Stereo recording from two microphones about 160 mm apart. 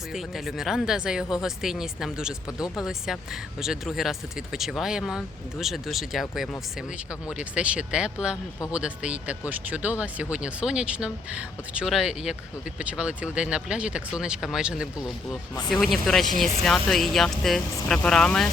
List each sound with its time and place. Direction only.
0.1 s speech: centre (ahead or behind)